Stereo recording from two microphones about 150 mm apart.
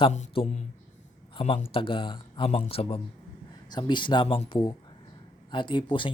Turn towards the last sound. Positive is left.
turn(degrees=35)  # may be behind; listen again after turning